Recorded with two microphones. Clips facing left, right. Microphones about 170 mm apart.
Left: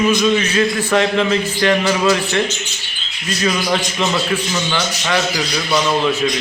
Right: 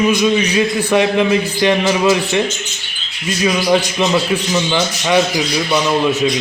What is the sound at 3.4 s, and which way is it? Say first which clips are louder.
A man's voice: right 4 dB; 15° right (ahead or behind).